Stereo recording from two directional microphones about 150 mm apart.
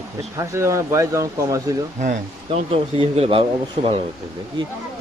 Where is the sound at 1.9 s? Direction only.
60° right (ahead or behind).